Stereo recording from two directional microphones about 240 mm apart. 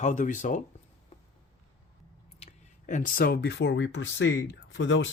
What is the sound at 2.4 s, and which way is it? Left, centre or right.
Speech, left.